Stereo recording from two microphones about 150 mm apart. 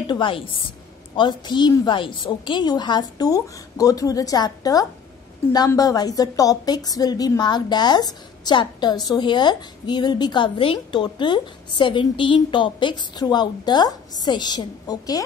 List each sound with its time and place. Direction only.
0.0 s a woman's voice: 35° left (ahead or behind)